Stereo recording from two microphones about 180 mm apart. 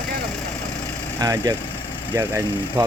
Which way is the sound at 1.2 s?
20° right (ahead or behind).